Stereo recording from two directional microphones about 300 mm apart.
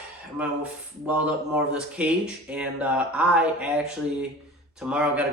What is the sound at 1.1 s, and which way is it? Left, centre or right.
A man's voice, centre.